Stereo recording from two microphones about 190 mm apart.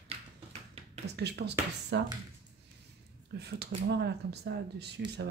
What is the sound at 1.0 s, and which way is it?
Speech, 60° right (ahead or behind).